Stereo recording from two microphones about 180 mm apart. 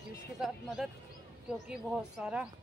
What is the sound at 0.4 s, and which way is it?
Speech, centre (ahead or behind).